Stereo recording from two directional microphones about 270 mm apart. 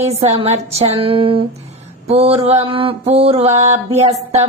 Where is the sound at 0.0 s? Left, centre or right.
Right.